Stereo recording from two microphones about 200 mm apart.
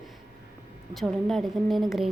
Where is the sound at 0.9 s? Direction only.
Centre (ahead or behind).